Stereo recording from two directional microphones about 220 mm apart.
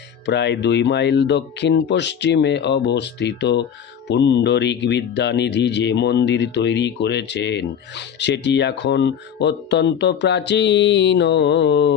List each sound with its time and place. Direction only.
0.3 s speech: 50° left (ahead or behind)